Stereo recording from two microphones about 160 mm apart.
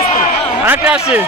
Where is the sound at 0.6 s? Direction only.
10° right (ahead or behind).